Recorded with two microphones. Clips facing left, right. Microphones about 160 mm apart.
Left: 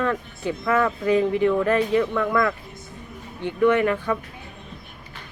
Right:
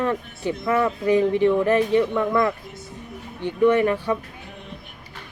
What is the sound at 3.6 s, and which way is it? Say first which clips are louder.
Speech: right 1 dB; 25° right (ahead or behind).